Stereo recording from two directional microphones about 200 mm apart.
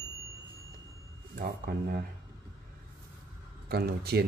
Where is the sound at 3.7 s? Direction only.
50° right (ahead or behind).